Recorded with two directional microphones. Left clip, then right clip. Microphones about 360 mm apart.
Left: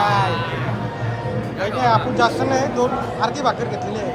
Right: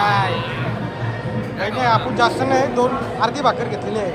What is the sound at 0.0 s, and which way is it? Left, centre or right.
Music, centre.